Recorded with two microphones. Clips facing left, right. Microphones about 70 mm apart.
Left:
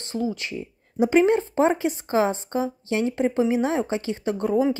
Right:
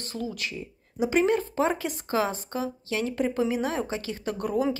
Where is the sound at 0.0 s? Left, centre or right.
Left.